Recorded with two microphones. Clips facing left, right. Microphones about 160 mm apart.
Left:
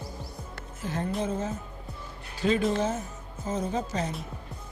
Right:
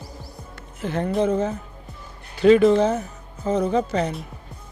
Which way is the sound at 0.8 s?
70° right (ahead or behind).